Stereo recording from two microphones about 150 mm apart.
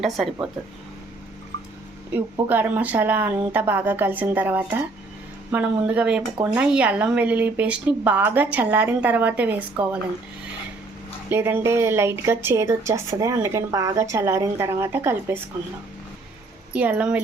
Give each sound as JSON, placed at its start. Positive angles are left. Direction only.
{"t": 0.0, "sound": "speech", "side_deg": 0}
{"t": 2.1, "sound": "a woman's voice", "side_deg": -15}
{"t": 11.3, "sound": "a woman's voice", "side_deg": -15}
{"t": 16.7, "sound": "a woman's voice", "side_deg": -10}